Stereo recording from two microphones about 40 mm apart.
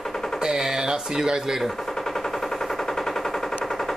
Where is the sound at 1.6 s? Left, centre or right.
Centre.